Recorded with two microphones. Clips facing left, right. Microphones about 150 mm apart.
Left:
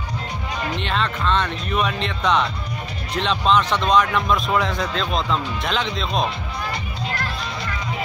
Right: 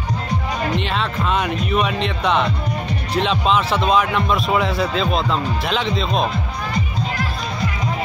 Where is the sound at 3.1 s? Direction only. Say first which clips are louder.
Right 1 dB; 5° right (ahead or behind).